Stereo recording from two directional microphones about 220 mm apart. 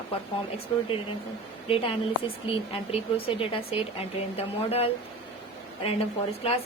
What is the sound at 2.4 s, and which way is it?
A woman's voice, 25° left (ahead or behind).